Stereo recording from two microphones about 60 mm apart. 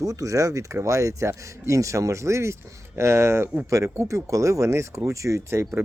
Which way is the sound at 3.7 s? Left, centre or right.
Right.